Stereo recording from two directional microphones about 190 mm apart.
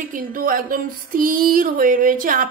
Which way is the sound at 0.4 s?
50° right (ahead or behind).